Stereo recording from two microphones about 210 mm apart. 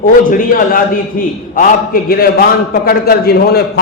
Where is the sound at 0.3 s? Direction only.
40° left (ahead or behind).